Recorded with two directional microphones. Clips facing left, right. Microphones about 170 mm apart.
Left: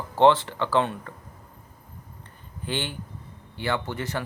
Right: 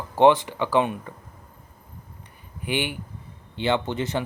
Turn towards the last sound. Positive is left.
turn(degrees=-20)  # may be behind; listen again after turning